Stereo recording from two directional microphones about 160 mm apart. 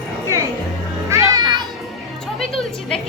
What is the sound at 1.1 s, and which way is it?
Children playing, 25° right (ahead or behind).